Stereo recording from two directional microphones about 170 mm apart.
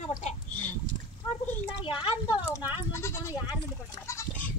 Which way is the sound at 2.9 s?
15° left (ahead or behind).